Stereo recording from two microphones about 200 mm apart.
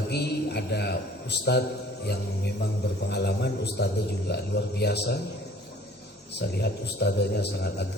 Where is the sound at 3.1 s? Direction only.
55° left (ahead or behind).